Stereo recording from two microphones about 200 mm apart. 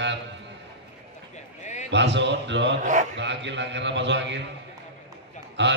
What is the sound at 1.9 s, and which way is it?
Mantra, 60° right (ahead or behind).